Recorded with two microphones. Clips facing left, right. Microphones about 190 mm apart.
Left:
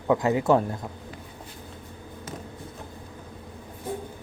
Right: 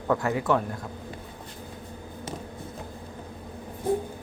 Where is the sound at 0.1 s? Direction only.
20° left (ahead or behind).